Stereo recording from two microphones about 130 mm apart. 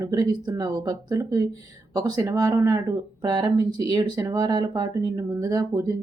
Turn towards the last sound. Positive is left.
turn(degrees=-25)  # may be behind; listen again after turning